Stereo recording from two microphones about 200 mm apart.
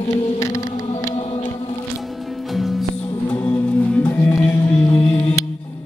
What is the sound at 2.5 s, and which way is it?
Music, centre (ahead or behind).